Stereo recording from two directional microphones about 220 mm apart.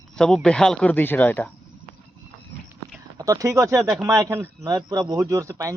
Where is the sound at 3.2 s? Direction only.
15° right (ahead or behind).